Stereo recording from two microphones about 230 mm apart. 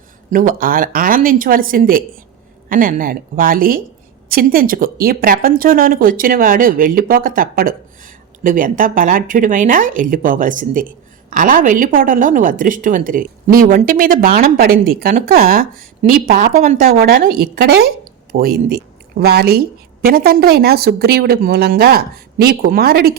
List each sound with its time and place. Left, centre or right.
0.3 s a woman's voice: right